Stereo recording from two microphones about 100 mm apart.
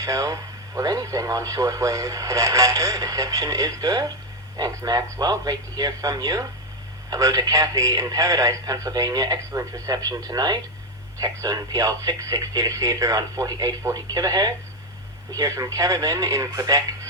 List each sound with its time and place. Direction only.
0.0 s speech: 35° right (ahead or behind)